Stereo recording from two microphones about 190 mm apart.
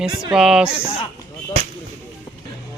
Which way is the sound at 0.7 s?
15° left (ahead or behind).